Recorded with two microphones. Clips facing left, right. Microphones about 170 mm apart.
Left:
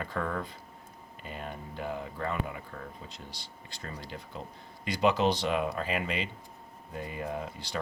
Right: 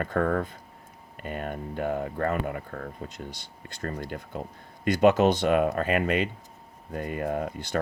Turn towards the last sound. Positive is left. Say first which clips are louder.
# right 7 dB
turn(degrees=-55)  # may be behind; listen again after turning